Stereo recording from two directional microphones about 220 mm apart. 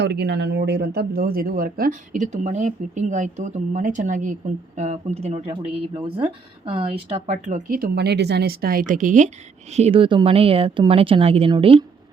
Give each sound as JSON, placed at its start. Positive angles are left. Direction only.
{"t": 0.0, "sound": "speech", "side_deg": -50}